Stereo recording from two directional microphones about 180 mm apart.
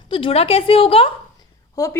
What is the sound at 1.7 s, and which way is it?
Speech, 20° left (ahead or behind).